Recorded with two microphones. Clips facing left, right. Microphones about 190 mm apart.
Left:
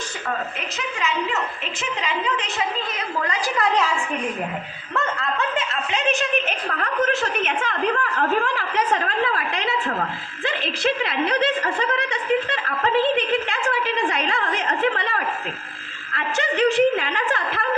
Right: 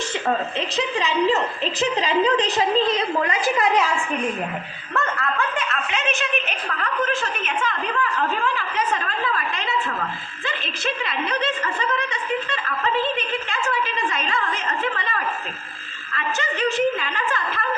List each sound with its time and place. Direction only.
0.8 s a woman's voice: 35° right (ahead or behind)
4.9 s speech: 15° left (ahead or behind); by 6.7 s 40° left (ahead or behind)
6.7 s a woman's voice: 55° left (ahead or behind)
16.1 s a woman's voice: 65° left (ahead or behind)